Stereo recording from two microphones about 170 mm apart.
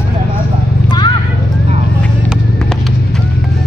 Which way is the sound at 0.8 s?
25° left (ahead or behind).